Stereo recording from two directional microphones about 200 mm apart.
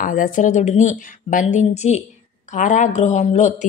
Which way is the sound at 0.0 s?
40° left (ahead or behind).